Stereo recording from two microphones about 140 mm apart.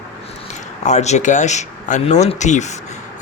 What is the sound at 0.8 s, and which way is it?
Speech, 55° left (ahead or behind).